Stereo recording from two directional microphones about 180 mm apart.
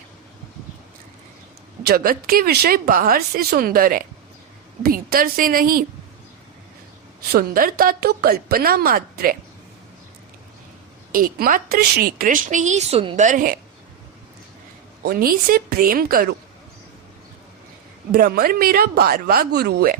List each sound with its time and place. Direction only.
1.9 s a woman's voice: 55° right (ahead or behind)
7.3 s speech: 55° right (ahead or behind)
11.1 s a woman's voice: 50° right (ahead or behind)
15.0 s speech: 55° right (ahead or behind)
18.1 s speech: 60° right (ahead or behind)